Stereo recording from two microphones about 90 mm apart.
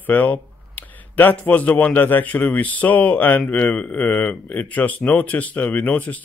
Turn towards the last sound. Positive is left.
turn(degrees=20)  # may be behind; listen again after turning